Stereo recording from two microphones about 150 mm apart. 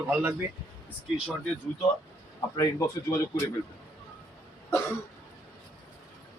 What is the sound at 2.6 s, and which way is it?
Speech, 20° left (ahead or behind).